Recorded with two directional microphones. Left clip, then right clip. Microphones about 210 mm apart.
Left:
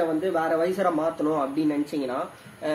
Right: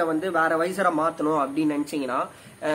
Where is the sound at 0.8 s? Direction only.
15° right (ahead or behind).